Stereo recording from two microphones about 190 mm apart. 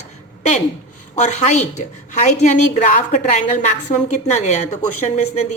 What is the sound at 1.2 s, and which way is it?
A woman's voice, 40° left (ahead or behind).